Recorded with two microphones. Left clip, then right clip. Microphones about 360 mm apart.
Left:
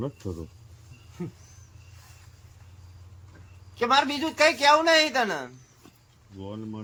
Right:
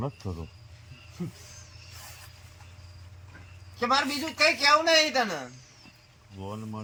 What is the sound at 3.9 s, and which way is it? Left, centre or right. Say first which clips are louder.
Speech: left 3 dB; centre.